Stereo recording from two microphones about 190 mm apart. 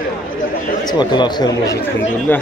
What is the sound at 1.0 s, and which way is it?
Speech, 25° left (ahead or behind).